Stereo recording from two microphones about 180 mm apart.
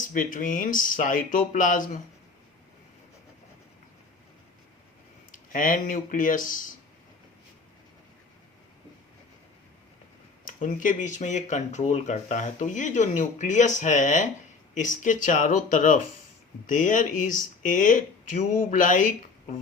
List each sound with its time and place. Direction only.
0.1 s speech: 45° left (ahead or behind)
5.3 s speech: 50° left (ahead or behind)
10.4 s speech: 45° left (ahead or behind)